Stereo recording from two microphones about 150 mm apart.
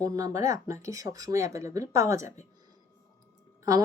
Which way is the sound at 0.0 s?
25° right (ahead or behind).